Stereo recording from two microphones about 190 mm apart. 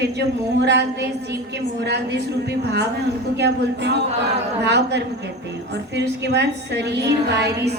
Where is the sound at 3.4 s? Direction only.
60° right (ahead or behind).